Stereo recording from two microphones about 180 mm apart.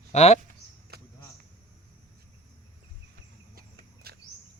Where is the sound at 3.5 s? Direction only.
60° right (ahead or behind).